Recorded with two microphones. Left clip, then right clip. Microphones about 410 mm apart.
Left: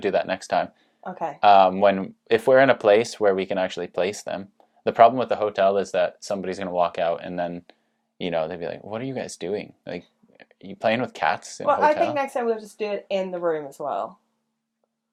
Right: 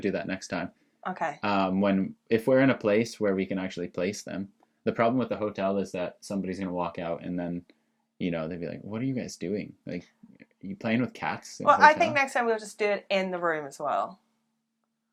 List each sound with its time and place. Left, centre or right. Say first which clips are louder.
0.0 s speech: left 8 dB; left
1.0 s a woman's voice: left 1 dB; centre
1.4 s speech: left 15 dB; left
11.6 s a woman's voice: right 1 dB; right